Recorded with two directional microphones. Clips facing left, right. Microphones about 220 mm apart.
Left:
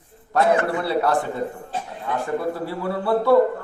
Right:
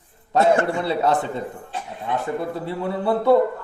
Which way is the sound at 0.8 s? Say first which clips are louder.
Even; 20° right (ahead or behind).